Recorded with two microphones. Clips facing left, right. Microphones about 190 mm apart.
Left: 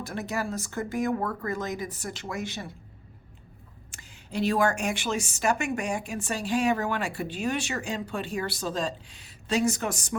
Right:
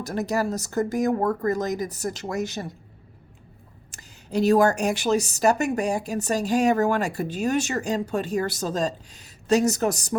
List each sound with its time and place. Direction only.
0.0 s a woman's voice: 40° right (ahead or behind)
3.9 s a woman's voice: 40° right (ahead or behind)